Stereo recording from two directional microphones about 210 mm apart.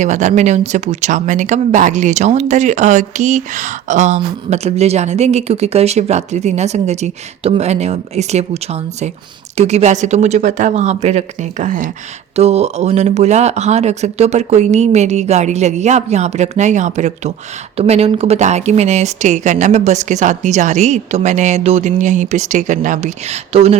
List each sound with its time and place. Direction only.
0.0 s speech: 35° right (ahead or behind)